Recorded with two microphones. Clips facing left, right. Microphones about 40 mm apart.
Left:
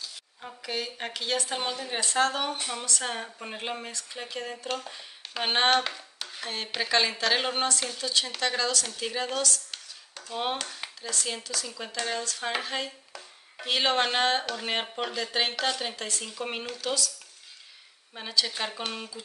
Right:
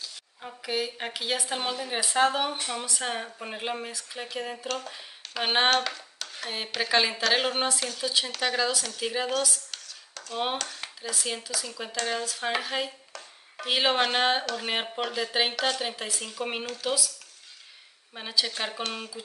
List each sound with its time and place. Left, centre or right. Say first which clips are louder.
0.4 s a woman's voice: right 3 dB; centre
5.9 s a sound: right 1 dB; centre
6.3 s a woman's voice: right 1 dB; centre
9.7 s a sound: even; centre
10.3 s a woman's voice: right 1 dB; centre
18.1 s a woman's voice: even; centre